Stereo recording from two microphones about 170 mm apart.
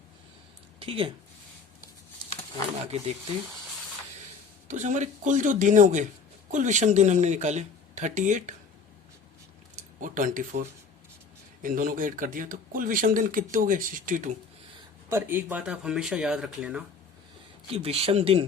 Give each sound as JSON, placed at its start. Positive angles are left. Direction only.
{"t": 0.8, "sound": "speech", "side_deg": -30}
{"t": 4.7, "sound": "speech", "side_deg": -45}
{"t": 10.0, "sound": "speech", "side_deg": -50}
{"t": 15.1, "sound": "speech", "side_deg": -10}
{"t": 17.7, "sound": "speech", "side_deg": -35}